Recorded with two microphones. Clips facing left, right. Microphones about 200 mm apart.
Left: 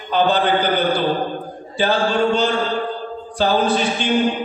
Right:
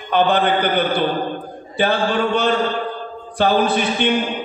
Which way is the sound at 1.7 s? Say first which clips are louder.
Even; 60° right (ahead or behind).